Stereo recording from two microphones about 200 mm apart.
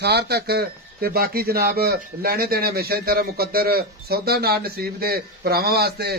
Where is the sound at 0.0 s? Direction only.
55° right (ahead or behind).